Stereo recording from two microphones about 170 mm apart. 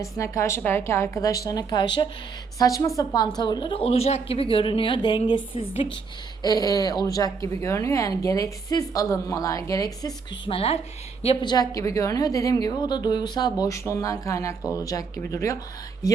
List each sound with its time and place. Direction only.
0.0 s a woman's voice: 20° left (ahead or behind)
10.4 s a woman's voice: 35° left (ahead or behind); by 15.5 s 20° left (ahead or behind)